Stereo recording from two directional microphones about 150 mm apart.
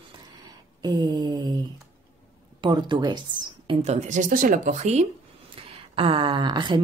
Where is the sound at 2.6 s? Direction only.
30° right (ahead or behind).